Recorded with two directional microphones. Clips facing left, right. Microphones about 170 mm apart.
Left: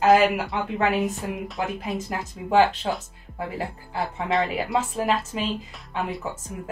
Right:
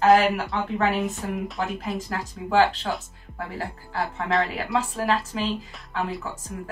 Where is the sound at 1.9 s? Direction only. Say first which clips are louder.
Left 1 dB; 20° left (ahead or behind).